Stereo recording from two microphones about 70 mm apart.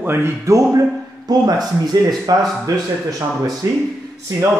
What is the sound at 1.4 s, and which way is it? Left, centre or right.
Speech, right.